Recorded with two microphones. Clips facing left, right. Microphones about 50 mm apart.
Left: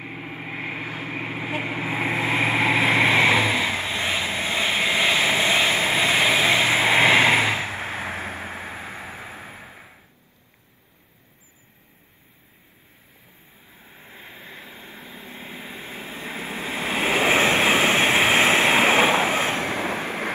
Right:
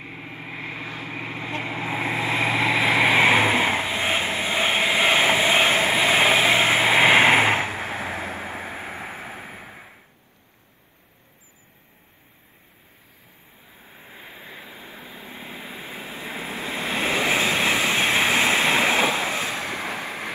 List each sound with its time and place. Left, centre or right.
0.0 s vehicle: left
1.4 s vehicle: centre
2.4 s vehicle: centre
3.3 s vehicle: right
4.4 s vehicle: centre
5.0 s vehicle: right
6.0 s vehicle: right
7.5 s vehicle: right
8.3 s a sound: right
13.7 s vehicle: centre
15.8 s waves: centre
17.0 s waves: left
18.0 s vehicle: left